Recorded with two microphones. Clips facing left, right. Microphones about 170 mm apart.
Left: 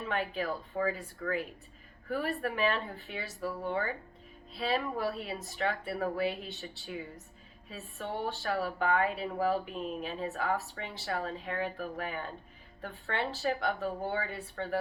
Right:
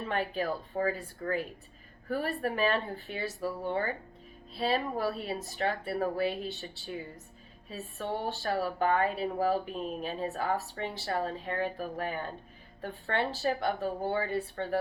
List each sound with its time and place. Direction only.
0.1 s speech: 35° right (ahead or behind)